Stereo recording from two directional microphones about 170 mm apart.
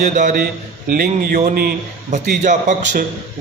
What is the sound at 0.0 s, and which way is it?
Speech, 50° right (ahead or behind).